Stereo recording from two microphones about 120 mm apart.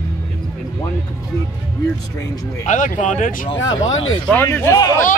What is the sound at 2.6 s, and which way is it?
Speech, 90° left.